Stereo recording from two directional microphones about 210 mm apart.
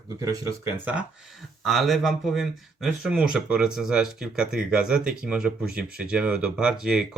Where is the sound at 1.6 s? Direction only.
Centre (ahead or behind).